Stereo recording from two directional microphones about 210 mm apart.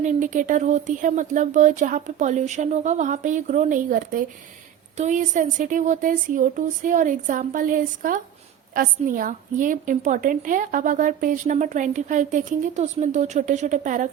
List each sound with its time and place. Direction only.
0.0 s a woman's voice: 35° right (ahead or behind)